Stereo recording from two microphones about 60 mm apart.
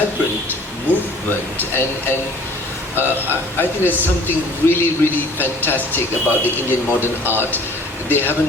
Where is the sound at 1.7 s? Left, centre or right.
Left.